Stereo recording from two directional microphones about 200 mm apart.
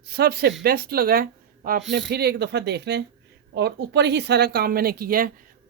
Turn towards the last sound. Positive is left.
turn(degrees=-45)  # may be behind; listen again after turning